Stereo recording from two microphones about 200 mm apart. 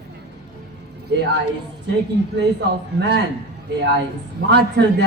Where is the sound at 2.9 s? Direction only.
60° right (ahead or behind).